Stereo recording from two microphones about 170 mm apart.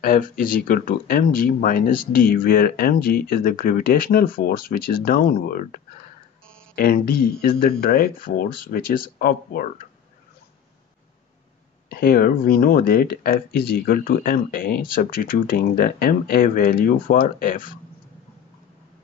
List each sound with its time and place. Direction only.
0.0 s speech: 55° left (ahead or behind)
11.9 s speech: 60° left (ahead or behind)